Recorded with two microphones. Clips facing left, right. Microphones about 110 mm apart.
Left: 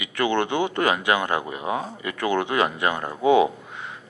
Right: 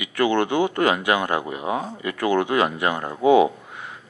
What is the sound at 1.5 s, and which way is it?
Speech, 25° right (ahead or behind).